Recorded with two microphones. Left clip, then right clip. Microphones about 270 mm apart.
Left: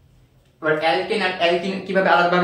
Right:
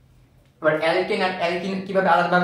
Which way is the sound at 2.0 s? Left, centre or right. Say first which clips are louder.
Left 2 dB; right.